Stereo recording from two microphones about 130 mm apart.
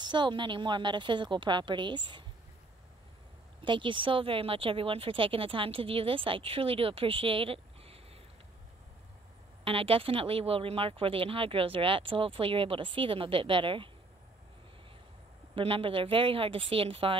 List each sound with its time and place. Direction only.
0.0 s speech: 35° right (ahead or behind)
3.6 s speech: 40° right (ahead or behind)
9.7 s speech: 45° right (ahead or behind)
15.5 s speech: 45° right (ahead or behind)